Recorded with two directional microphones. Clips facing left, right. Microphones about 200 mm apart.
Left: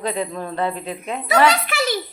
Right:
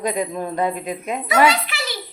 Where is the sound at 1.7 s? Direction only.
50° left (ahead or behind).